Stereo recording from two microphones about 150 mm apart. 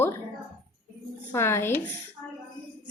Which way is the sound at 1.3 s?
15° left (ahead or behind).